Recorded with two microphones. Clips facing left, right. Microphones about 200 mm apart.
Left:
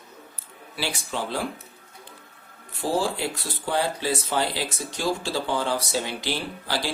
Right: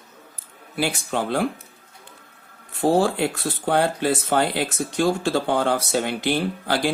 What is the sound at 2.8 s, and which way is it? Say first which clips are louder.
Speech: right 6 dB; 60° right (ahead or behind).